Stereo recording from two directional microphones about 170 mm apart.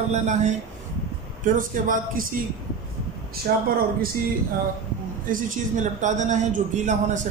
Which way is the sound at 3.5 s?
60° right (ahead or behind).